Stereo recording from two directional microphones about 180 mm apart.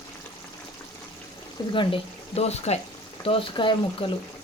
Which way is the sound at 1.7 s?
30° left (ahead or behind).